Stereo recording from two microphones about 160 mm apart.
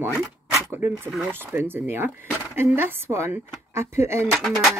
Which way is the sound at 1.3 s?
15° right (ahead or behind).